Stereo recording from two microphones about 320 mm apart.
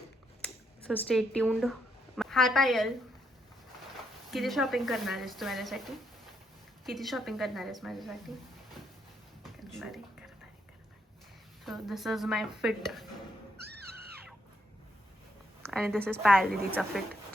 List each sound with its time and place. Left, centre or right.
0.4 s a woman's voice: centre
4.3 s speech: centre
9.4 s a sound: centre
11.6 s speech: centre
13.6 s music: right
15.6 s speech: centre